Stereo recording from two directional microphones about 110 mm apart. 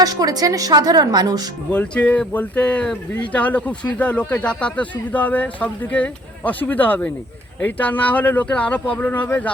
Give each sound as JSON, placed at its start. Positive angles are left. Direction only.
{"t": 0.0, "sound": "a woman's voice", "side_deg": -35}
{"t": 1.7, "sound": "speech", "side_deg": 15}